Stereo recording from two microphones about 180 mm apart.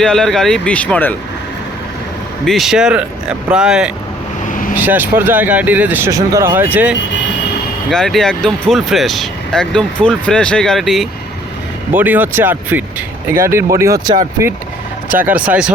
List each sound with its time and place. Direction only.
0.0 s speech: 5° left (ahead or behind)
2.4 s speech: centre (ahead or behind)
4.4 s vehicle: 45° left (ahead or behind)
4.8 s speech: 10° right (ahead or behind)
7.9 s speech: centre (ahead or behind)